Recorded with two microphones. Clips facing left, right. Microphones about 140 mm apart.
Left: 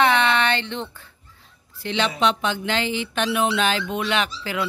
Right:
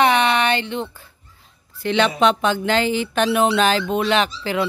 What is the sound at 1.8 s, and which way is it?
Speech, 55° right (ahead or behind).